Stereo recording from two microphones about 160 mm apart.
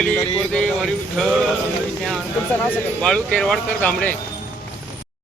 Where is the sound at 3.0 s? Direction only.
5° left (ahead or behind).